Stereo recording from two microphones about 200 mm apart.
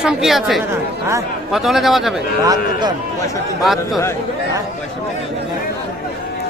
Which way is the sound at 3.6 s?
Centre (ahead or behind).